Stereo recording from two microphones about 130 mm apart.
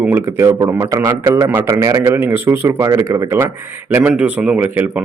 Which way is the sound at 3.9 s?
10° right (ahead or behind).